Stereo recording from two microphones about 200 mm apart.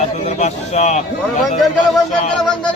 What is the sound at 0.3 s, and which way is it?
Speech, 35° left (ahead or behind).